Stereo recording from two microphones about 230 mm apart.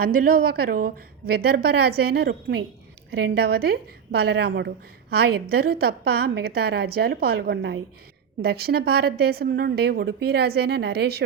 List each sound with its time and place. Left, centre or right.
0.0 s a woman's voice: right